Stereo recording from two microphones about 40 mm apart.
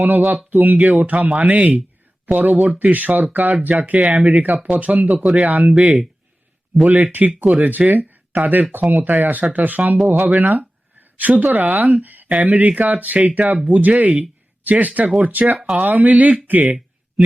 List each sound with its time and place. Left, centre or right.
0.5 s speech: right
6.8 s speech: right
9.4 s speech: right